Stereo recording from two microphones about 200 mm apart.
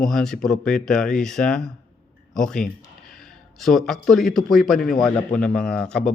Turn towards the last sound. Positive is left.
turn(degrees=5)  # may be behind; listen again after turning